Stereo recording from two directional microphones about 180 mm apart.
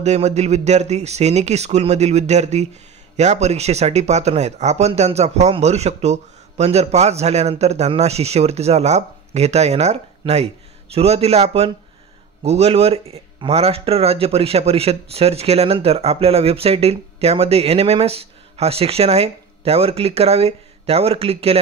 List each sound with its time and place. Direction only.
0.0 s speech: 40° right (ahead or behind)